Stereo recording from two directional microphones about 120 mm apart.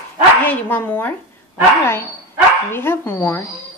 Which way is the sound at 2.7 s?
20° left (ahead or behind).